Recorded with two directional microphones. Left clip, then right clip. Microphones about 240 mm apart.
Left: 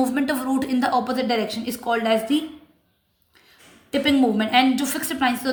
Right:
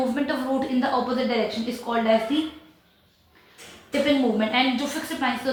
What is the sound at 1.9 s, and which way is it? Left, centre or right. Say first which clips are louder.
Speech: left 3 dB; left.